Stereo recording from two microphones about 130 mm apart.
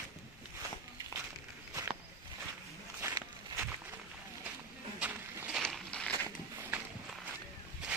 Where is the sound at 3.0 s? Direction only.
25° right (ahead or behind).